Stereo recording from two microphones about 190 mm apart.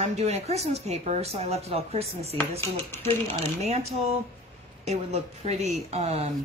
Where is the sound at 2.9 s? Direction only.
10° left (ahead or behind).